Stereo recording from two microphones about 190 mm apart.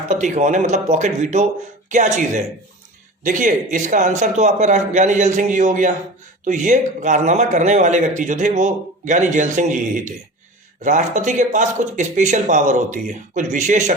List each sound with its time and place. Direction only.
0.1 s a man's voice: 40° right (ahead or behind)